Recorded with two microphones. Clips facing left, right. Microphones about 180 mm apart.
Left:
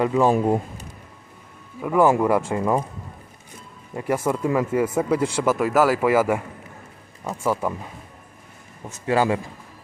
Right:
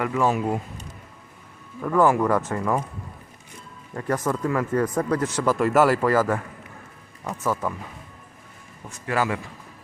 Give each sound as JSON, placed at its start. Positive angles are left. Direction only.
{"t": 0.0, "sound": "speech", "side_deg": 25}
{"t": 1.8, "sound": "speech", "side_deg": 10}
{"t": 3.9, "sound": "speech", "side_deg": 10}
{"t": 4.4, "sound": "speech", "side_deg": 20}
{"t": 4.7, "sound": "speech", "side_deg": 10}
{"t": 7.4, "sound": "speech", "side_deg": 15}
{"t": 8.9, "sound": "speech", "side_deg": 25}